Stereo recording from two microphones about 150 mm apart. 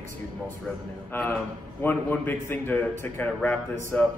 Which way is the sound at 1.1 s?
15° left (ahead or behind).